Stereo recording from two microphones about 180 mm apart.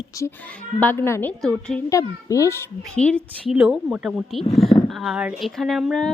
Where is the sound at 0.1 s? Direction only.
15° left (ahead or behind).